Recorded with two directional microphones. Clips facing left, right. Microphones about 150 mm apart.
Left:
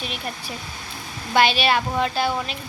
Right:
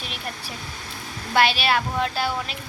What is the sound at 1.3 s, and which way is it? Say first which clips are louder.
A woman's voice: left 2 dB; 5° right (ahead or behind).